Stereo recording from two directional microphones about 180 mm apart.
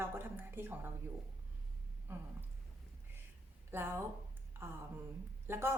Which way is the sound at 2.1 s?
10° right (ahead or behind).